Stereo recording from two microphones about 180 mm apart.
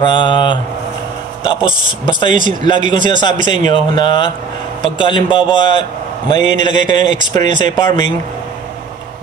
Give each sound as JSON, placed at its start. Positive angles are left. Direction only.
{"t": 0.0, "sound": "a man's voice", "side_deg": 25}